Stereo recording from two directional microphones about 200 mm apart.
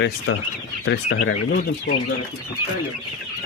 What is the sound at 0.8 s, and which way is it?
Speech, 80° left.